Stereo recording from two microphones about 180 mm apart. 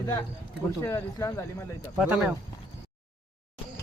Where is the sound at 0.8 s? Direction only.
15° left (ahead or behind).